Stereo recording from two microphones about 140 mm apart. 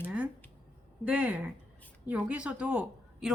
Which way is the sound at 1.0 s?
10° right (ahead or behind).